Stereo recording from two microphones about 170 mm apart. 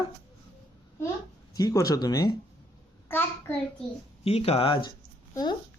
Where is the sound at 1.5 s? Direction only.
20° left (ahead or behind).